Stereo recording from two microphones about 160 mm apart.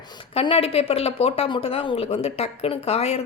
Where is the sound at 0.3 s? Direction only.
35° left (ahead or behind).